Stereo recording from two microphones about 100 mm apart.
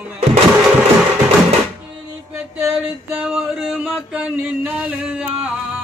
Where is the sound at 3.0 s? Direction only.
10° right (ahead or behind).